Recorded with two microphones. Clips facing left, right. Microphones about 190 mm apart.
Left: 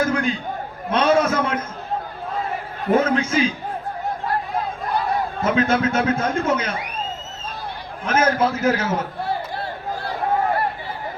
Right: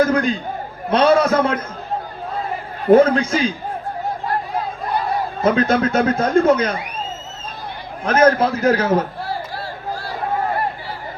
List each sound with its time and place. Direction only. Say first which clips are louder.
0.0 s a man's voice: right 4 dB; 40° right (ahead or behind)
3.0 s speech: right 4 dB; 35° right (ahead or behind)
5.4 s speech: right 4 dB; 35° right (ahead or behind)
8.0 s speech: right 5 dB; 35° right (ahead or behind)